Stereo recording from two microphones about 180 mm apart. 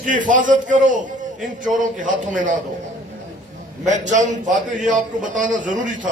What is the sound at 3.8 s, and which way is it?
A man's voice, 45° right (ahead or behind).